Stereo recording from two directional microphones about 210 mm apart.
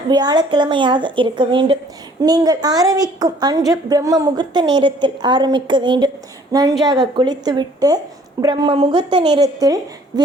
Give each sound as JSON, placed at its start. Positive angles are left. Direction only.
{"t": 0.1, "sound": "a woman's voice", "side_deg": -20}